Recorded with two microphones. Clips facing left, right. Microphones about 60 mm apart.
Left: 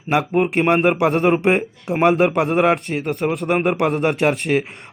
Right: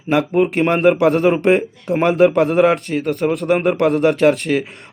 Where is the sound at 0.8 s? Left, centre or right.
Centre.